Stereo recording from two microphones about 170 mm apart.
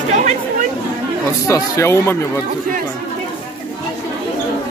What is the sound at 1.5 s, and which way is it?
Speech, 15° left (ahead or behind).